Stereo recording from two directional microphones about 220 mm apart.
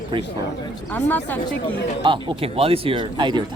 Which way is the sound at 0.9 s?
10° left (ahead or behind).